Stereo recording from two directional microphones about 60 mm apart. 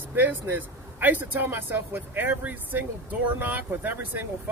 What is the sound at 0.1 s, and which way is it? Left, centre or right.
A man's voice, right.